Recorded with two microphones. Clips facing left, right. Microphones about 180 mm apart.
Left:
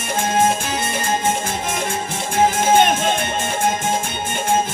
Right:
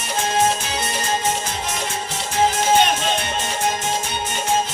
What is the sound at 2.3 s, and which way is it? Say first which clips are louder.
Music: left 2 dB; 50° left (ahead or behind).